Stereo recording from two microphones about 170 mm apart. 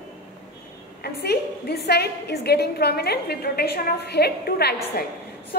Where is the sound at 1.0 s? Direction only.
65° left (ahead or behind).